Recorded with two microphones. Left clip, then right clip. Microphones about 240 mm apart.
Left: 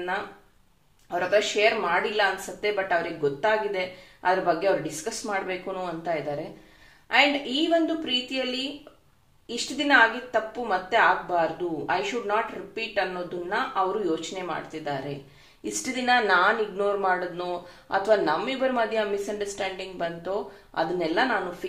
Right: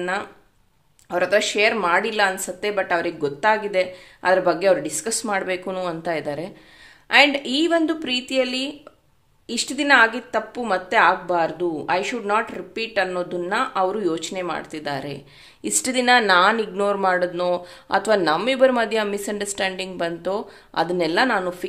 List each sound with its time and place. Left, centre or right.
1.1 s speech: right